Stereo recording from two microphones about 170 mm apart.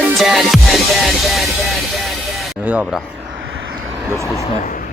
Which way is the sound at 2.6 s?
10° right (ahead or behind).